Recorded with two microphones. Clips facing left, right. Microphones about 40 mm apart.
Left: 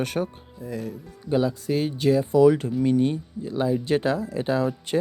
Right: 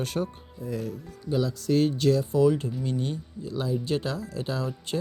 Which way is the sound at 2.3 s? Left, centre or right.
Left.